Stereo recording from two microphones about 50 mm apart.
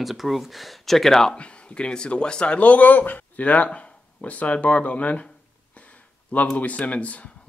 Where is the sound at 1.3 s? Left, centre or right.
Left.